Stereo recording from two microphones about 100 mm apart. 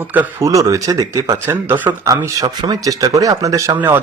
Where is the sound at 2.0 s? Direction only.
35° right (ahead or behind).